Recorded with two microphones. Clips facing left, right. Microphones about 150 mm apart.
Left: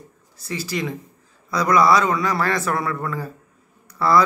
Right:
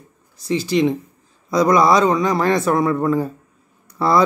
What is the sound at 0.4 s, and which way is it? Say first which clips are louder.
Speech: right 9 dB; 20° right (ahead or behind).